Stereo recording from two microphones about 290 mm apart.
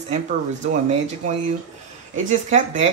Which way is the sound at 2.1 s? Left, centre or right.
Right.